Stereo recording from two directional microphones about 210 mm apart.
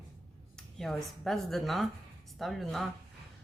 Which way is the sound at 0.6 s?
Centre (ahead or behind).